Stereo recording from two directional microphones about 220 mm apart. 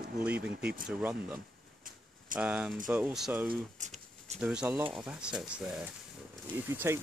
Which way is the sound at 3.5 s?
35° right (ahead or behind).